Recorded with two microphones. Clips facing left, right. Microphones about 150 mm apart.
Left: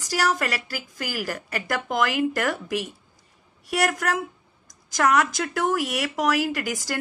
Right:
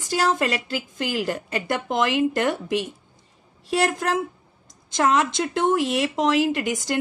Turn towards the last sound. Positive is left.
turn(degrees=-20)  # may be behind; listen again after turning